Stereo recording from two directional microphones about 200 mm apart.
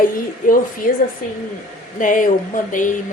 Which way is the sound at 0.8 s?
45° left (ahead or behind).